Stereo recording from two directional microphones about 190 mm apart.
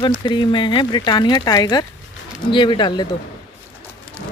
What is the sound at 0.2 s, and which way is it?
Speech, 25° left (ahead or behind).